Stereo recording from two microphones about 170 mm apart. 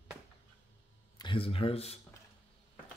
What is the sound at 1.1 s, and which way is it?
Speech, 30° left (ahead or behind).